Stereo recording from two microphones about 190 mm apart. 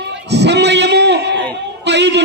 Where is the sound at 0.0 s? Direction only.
65° right (ahead or behind).